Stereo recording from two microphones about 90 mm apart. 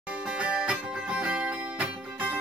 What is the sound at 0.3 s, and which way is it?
Music, 15° right (ahead or behind).